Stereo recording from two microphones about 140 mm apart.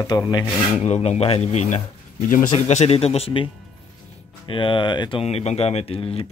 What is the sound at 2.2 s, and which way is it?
Speech, 75° left (ahead or behind).